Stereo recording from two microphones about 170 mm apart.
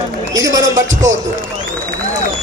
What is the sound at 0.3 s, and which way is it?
Speech, 20° right (ahead or behind).